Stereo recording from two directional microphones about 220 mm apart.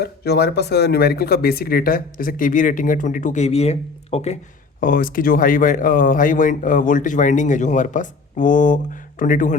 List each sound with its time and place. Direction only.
0.0 s speech: 45° left (ahead or behind); by 4.4 s 30° left (ahead or behind)
4.8 s speech: 40° left (ahead or behind)